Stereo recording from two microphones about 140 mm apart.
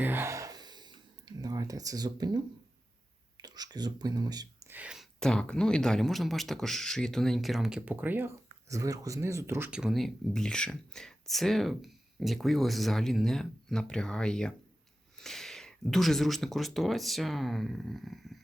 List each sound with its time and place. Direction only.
0.0 s a sound: 15° right (ahead or behind)
3.4 s speech: 30° right (ahead or behind)
4.7 s speech: 10° right (ahead or behind)
5.2 s speech: 5° left (ahead or behind)